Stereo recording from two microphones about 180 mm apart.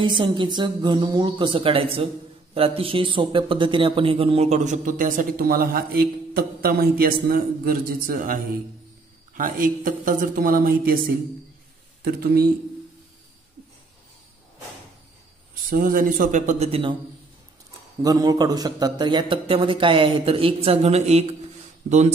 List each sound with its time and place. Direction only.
0.0 s a man's voice: 25° right (ahead or behind); by 12.4 s 55° right (ahead or behind)
15.7 s speech: 50° right (ahead or behind); by 16.9 s 35° right (ahead or behind)
18.0 s speech: 20° right (ahead or behind); by 22.1 s 40° right (ahead or behind)